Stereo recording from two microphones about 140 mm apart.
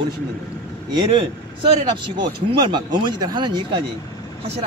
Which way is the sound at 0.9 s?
35° right (ahead or behind).